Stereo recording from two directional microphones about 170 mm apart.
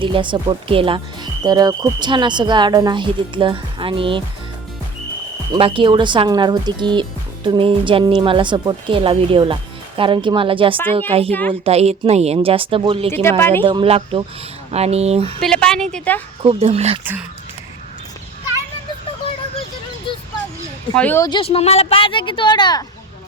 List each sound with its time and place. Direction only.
0.0 s speech: 30° right (ahead or behind)
5.5 s a woman's voice: 30° right (ahead or behind)
11.3 s a woman's voice: 10° left (ahead or behind)
11.6 s a woman's voice: 35° right (ahead or behind)
13.2 s a woman's voice: 15° left (ahead or behind)
13.7 s a woman's voice: 30° right (ahead or behind)
15.4 s a woman's voice: 5° left (ahead or behind)
16.4 s a woman's voice: 35° right (ahead or behind)
20.1 s a sound: 30° left (ahead or behind)
20.9 s a woman's voice: 10° left (ahead or behind)
21.2 s a woman's voice: 30° left (ahead or behind)